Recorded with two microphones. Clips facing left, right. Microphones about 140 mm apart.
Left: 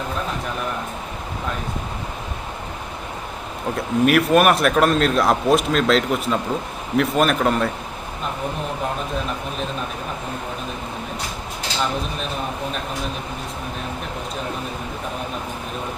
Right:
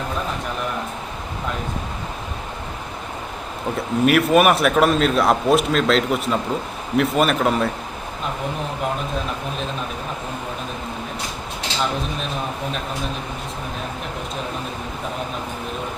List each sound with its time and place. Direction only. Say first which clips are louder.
3.8 s speech: even; centre (ahead or behind)